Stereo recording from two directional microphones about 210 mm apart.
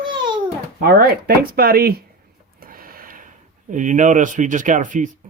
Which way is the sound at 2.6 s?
45° right (ahead or behind).